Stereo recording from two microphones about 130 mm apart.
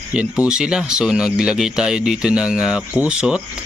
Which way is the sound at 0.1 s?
10° right (ahead or behind).